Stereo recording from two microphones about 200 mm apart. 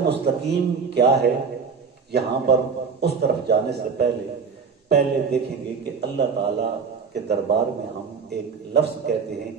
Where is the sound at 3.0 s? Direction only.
55° right (ahead or behind).